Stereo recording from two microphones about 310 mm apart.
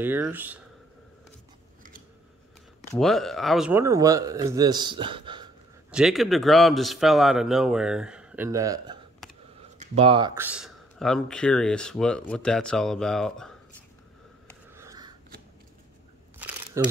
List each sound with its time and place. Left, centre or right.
0.0 s speech: centre
1.8 s scissors: right
2.9 s a man's voice: centre
5.9 s speech: centre
9.2 s computer keyboard: centre
9.6 s speech: centre
14.8 s a sound: centre
16.3 s camera: centre